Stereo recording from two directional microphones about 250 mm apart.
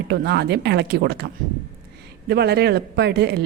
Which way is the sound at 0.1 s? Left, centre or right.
Right.